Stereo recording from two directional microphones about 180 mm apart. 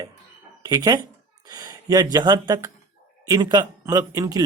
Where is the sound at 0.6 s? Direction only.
20° right (ahead or behind).